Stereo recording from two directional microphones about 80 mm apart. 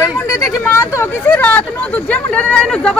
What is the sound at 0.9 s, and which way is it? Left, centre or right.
Speech, left.